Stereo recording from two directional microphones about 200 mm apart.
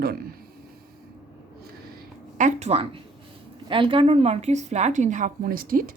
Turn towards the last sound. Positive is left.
turn(degrees=-45)  # may be behind; listen again after turning